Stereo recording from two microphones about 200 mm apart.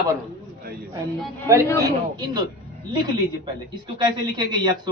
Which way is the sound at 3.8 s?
20° right (ahead or behind).